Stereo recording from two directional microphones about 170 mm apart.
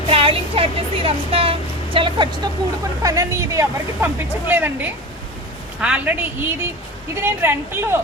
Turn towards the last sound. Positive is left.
turn(degrees=-15)  # may be behind; listen again after turning